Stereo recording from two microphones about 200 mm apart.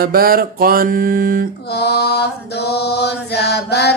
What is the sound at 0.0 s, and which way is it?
Mantra, 45° right (ahead or behind).